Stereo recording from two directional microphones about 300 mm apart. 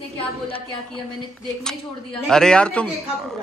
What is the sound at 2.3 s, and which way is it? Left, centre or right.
Speech, centre.